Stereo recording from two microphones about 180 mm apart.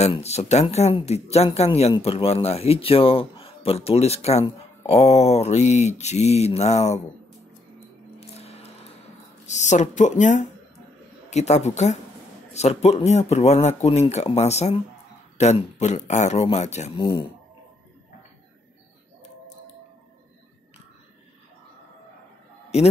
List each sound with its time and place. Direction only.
0.0 s speech: 35° left (ahead or behind)
8.2 s music: 35° left (ahead or behind)
9.5 s a woman's voice: 40° left (ahead or behind)
17.0 s speech: 25° left (ahead or behind)